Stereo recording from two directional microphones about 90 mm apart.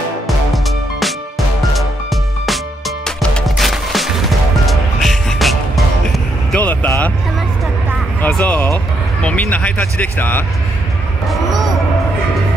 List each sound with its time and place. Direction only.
0.5 s music: centre (ahead or behind)
3.4 s music: centre (ahead or behind)
6.5 s vehicle: 20° left (ahead or behind)
8.2 s music: 20° left (ahead or behind)
9.2 s speech: 15° left (ahead or behind)